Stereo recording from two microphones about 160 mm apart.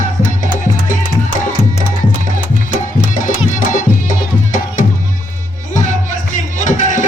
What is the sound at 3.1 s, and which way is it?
Music, 55° left (ahead or behind).